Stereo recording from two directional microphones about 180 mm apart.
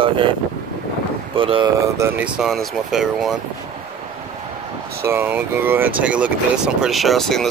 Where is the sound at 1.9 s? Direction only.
10° right (ahead or behind).